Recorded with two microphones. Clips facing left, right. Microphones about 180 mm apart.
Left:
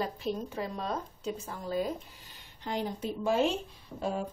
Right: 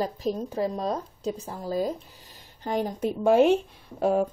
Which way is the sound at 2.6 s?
45° right (ahead or behind).